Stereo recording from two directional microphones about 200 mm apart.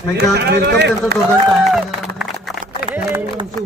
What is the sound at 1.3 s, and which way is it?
Run, centre (ahead or behind).